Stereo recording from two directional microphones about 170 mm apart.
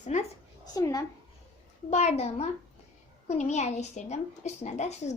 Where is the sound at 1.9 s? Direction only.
40° left (ahead or behind).